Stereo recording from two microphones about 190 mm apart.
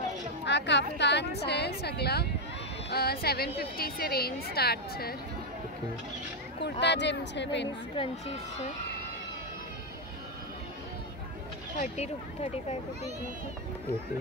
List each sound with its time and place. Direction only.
0.5 s a woman's voice: 65° left (ahead or behind)
6.6 s a woman's voice: 65° left (ahead or behind)
7.9 s speech: 30° left (ahead or behind)
11.8 s speech: 35° left (ahead or behind)